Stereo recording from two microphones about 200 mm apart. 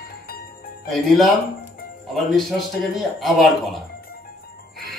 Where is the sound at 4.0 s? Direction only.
50° left (ahead or behind).